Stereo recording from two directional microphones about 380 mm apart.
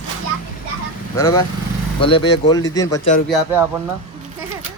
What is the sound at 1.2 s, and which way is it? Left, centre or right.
Speech, centre.